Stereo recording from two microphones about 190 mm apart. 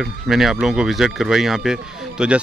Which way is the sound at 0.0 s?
Centre (ahead or behind).